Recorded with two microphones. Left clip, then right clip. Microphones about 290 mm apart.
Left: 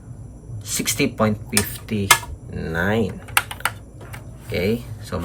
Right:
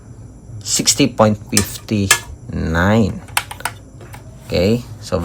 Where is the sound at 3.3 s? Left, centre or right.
Centre.